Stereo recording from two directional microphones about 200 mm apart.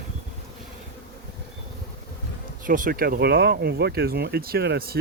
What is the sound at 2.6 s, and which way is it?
Speech, 45° right (ahead or behind).